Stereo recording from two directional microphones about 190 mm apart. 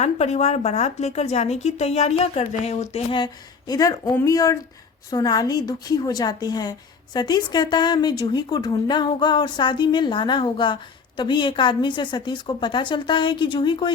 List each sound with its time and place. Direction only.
0.0 s a woman's voice: 35° left (ahead or behind)
3.7 s a woman's voice: 20° left (ahead or behind)